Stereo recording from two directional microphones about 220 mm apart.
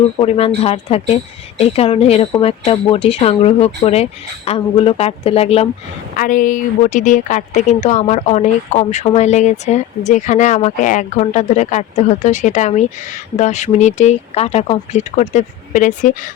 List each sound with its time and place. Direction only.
0.2 s speech: 25° left (ahead or behind)
6.1 s a woman's voice: 35° left (ahead or behind)